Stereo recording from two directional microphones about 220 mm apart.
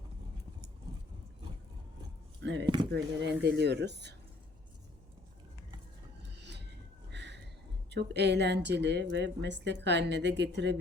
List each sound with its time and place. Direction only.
2.4 s speech: 55° right (ahead or behind)
6.4 s a sound: 50° right (ahead or behind)
7.9 s speech: 50° right (ahead or behind)